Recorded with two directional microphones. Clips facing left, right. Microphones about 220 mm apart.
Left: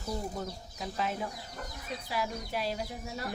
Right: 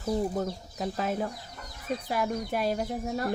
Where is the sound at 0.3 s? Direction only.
45° right (ahead or behind).